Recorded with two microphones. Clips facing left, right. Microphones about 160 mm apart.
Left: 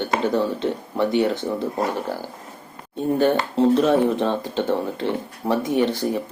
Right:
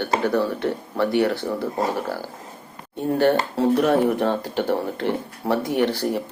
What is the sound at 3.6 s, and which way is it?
Speech, 20° left (ahead or behind).